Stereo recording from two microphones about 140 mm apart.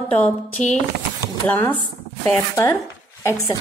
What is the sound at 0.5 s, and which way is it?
Speech, 55° left (ahead or behind).